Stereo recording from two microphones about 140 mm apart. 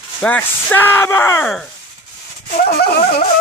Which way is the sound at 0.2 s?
10° left (ahead or behind).